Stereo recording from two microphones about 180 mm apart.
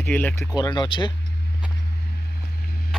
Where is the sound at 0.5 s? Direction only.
25° left (ahead or behind).